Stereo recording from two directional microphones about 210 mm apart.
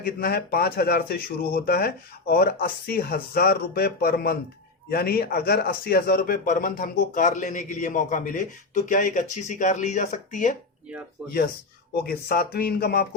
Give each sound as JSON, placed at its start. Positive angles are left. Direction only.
{"t": 0.0, "sound": "speech", "side_deg": 45}
{"t": 12.0, "sound": "speech", "side_deg": 45}